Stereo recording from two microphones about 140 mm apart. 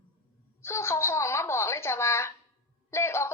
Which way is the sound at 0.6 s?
20° left (ahead or behind).